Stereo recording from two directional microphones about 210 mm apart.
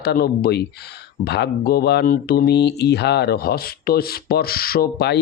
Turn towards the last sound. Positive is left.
turn(degrees=50)  # may be behind; listen again after turning